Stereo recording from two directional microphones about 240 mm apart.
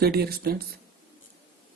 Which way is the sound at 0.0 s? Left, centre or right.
Right.